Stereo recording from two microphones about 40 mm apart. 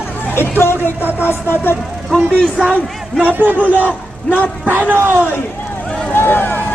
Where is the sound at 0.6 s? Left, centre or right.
Left.